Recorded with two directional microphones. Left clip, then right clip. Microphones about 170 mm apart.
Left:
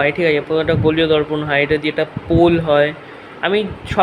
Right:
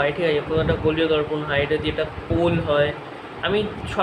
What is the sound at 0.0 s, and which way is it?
A man's voice, 50° left (ahead or behind).